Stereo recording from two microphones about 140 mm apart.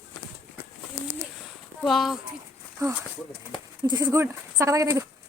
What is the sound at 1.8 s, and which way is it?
Speech, centre (ahead or behind).